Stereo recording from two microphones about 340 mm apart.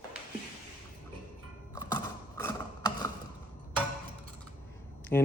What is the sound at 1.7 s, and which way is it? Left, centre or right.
Music, centre.